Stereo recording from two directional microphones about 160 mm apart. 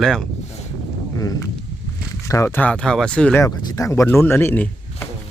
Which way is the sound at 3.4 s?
20° left (ahead or behind).